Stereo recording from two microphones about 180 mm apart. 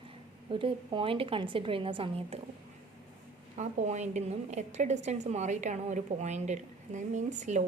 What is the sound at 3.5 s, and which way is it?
A woman's voice, 40° right (ahead or behind).